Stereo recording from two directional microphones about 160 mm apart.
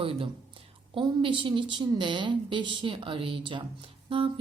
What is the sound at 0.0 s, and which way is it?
A woman's voice, 35° right (ahead or behind).